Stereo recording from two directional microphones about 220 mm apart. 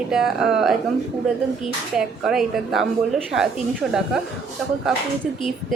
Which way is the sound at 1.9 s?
5° right (ahead or behind).